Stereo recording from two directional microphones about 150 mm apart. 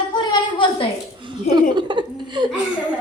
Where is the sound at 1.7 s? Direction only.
30° right (ahead or behind).